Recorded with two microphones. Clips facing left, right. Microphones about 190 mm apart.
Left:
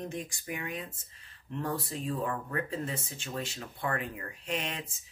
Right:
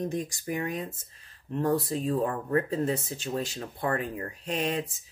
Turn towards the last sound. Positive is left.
turn(degrees=-40)  # may be behind; listen again after turning